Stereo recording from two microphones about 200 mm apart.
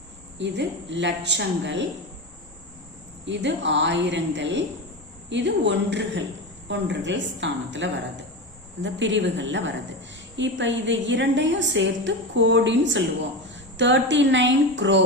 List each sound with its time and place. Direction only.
0.3 s a woman's voice: 60° right (ahead or behind)
3.2 s a woman's voice: 65° right (ahead or behind)